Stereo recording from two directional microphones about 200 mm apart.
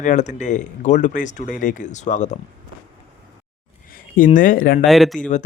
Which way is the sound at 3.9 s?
40° left (ahead or behind).